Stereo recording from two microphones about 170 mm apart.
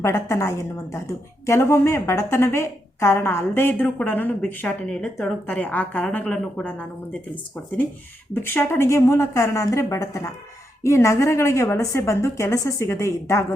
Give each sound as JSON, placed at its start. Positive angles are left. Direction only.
{"t": 0.0, "sound": "a woman's voice", "side_deg": 15}
{"t": 8.3, "sound": "a woman's voice", "side_deg": 15}